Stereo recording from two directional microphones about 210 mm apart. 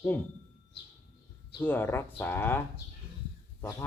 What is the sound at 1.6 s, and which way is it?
Speech, 10° left (ahead or behind).